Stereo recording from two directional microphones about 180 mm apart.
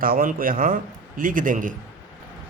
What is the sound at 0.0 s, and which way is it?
Speech, 55° right (ahead or behind).